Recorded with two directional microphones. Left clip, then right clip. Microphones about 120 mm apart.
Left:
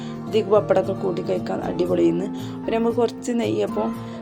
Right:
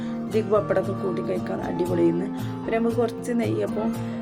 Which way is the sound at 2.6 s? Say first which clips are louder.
Left 3 dB; 10° left (ahead or behind).